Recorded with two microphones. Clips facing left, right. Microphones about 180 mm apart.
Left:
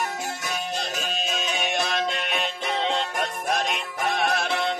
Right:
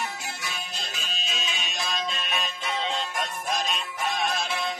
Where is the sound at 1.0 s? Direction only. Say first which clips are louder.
Left 7 dB; 50° left (ahead or behind).